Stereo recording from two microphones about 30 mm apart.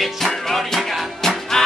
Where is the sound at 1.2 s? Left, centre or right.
Left.